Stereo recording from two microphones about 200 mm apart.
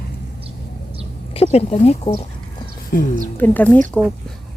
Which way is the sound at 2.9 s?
45° left (ahead or behind).